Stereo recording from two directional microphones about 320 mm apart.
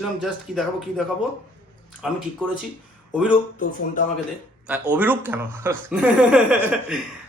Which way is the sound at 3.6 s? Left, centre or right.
Left.